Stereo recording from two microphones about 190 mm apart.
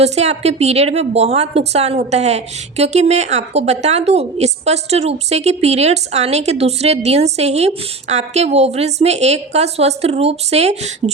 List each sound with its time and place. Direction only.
0.0 s a woman's voice: 35° right (ahead or behind)